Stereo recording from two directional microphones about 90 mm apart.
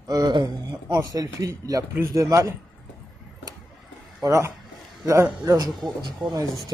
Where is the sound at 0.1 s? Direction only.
50° right (ahead or behind).